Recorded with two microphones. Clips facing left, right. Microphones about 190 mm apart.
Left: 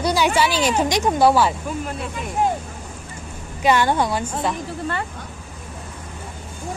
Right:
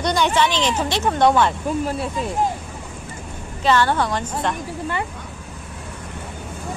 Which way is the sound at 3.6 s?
15° left (ahead or behind).